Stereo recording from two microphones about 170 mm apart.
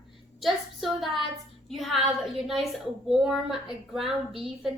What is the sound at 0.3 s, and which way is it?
A woman's voice, centre (ahead or behind).